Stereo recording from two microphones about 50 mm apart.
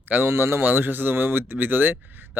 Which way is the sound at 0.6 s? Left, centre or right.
Right.